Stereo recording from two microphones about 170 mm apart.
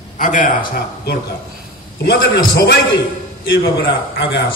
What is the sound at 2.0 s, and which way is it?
Speech, 75° left (ahead or behind).